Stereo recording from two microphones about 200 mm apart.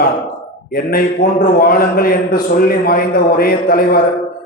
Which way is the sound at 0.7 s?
50° left (ahead or behind).